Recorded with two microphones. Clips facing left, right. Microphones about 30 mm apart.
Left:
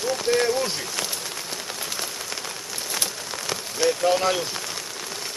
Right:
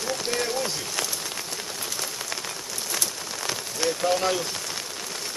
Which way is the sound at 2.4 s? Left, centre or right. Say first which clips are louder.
Left 1 dB; centre.